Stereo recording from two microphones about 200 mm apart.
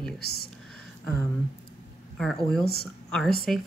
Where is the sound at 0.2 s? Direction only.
50° left (ahead or behind).